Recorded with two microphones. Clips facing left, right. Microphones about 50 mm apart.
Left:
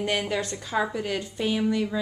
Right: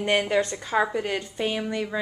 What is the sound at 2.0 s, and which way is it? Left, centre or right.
Speech, centre.